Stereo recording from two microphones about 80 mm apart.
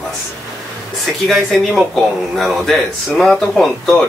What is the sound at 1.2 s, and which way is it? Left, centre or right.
Speech, centre.